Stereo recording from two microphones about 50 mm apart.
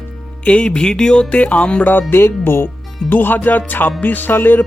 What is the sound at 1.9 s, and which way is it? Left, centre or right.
Speech, left.